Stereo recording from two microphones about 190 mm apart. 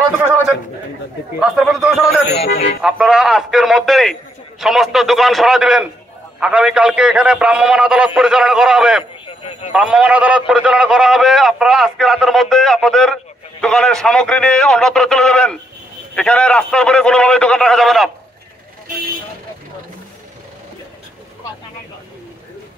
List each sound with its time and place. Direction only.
1.4 s a man's voice: 5° right (ahead or behind)
9.2 s a sound: 30° left (ahead or behind)
9.7 s a man's voice: 5° right (ahead or behind)